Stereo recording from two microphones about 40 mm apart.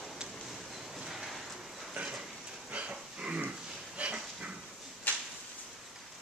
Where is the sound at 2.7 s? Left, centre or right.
Right.